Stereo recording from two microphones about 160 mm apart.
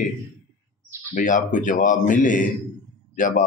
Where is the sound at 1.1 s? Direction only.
55° left (ahead or behind).